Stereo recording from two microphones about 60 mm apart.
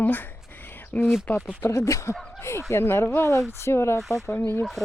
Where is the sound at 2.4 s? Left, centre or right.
Left.